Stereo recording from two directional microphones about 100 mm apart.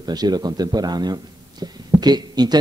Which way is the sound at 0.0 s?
45° right (ahead or behind).